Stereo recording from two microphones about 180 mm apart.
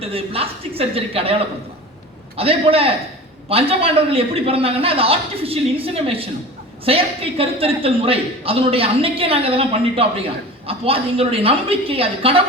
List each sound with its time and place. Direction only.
0.0 s a man's voice: 30° right (ahead or behind)